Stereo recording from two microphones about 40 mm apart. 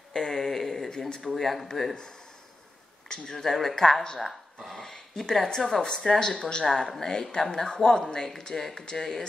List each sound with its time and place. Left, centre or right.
0.1 s a sound: centre
1.2 s speech: centre
3.1 s speech: centre
3.4 s speech: centre
4.2 s a sound: centre
5.3 s speech: centre